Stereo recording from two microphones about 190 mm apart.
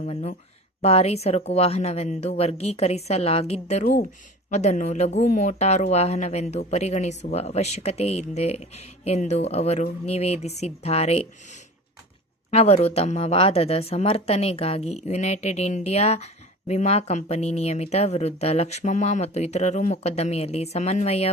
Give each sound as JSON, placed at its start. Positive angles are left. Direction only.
{"t": 0.0, "sound": "speech", "side_deg": 35}
{"t": 12.5, "sound": "speech", "side_deg": 35}